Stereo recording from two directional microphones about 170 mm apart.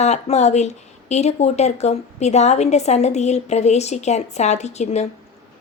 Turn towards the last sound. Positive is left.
turn(degrees=40)  # may be behind; listen again after turning